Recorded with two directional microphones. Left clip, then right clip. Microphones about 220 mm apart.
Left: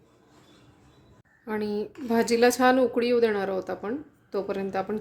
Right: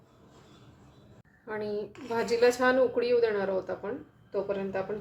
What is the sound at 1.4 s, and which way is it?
A woman's voice, 30° left (ahead or behind).